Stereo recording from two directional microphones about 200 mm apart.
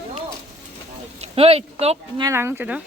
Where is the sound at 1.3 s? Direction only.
30° right (ahead or behind).